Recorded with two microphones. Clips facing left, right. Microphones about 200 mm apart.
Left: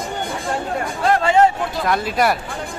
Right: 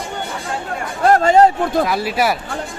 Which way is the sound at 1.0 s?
45° right (ahead or behind).